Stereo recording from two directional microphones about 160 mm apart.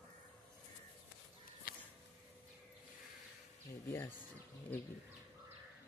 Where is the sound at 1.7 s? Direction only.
70° left (ahead or behind).